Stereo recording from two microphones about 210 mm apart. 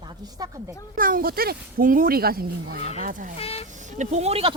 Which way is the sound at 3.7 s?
35° right (ahead or behind).